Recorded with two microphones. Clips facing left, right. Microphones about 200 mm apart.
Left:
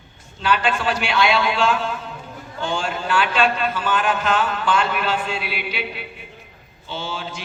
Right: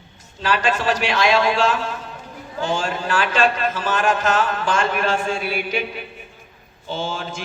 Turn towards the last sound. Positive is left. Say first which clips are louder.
# right 3 dB
turn(degrees=-50)  # may be behind; listen again after turning